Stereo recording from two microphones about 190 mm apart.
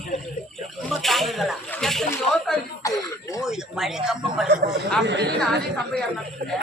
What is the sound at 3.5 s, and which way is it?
Speech, centre (ahead or behind).